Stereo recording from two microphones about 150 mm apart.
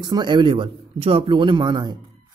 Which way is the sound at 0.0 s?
30° right (ahead or behind).